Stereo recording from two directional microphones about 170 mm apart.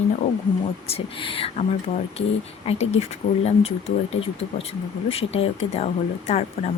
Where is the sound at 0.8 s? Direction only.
35° left (ahead or behind).